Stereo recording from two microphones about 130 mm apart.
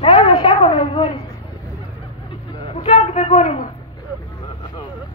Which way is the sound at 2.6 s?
50° left (ahead or behind).